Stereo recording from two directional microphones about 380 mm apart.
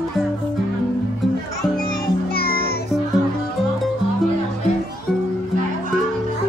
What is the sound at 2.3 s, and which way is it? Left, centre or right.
Music, left.